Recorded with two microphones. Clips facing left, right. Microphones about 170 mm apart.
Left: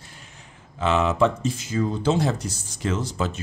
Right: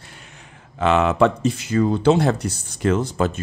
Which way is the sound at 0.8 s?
65° right (ahead or behind).